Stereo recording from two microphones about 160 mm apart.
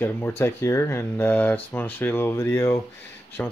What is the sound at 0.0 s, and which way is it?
Speech, 15° left (ahead or behind).